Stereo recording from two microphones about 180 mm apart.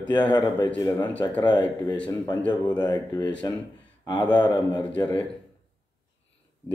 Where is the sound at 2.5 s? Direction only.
25° left (ahead or behind).